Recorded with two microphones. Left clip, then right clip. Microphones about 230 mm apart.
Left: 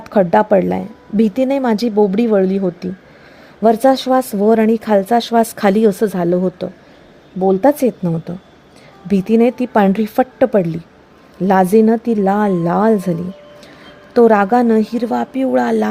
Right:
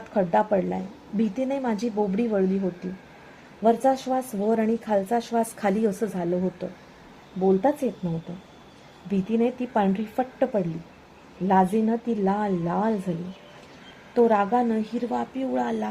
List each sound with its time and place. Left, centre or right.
0.1 s speech: left
3.6 s a woman's voice: left
14.1 s a woman's voice: left